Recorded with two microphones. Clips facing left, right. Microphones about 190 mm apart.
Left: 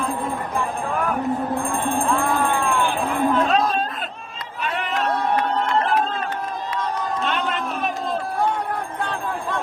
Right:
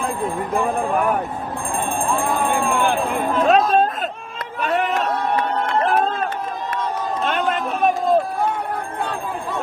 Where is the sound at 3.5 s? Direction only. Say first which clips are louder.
Right 5 dB; 50° right (ahead or behind).